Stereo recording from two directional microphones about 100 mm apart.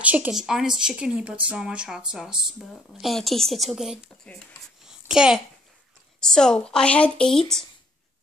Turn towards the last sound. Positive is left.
turn(degrees=5)  # may be behind; listen again after turning